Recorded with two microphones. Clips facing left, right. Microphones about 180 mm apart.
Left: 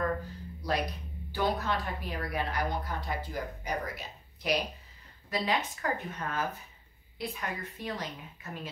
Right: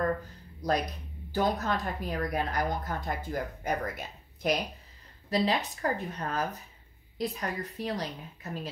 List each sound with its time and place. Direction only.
1.3 s speech: 45° right (ahead or behind)
5.3 s a woman's voice: 35° right (ahead or behind)